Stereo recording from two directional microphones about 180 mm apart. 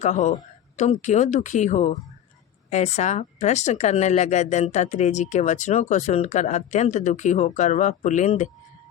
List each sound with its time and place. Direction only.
0.0 s speech: 40° left (ahead or behind)